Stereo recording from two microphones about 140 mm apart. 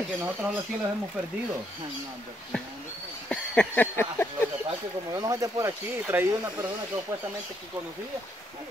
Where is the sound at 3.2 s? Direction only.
10° left (ahead or behind).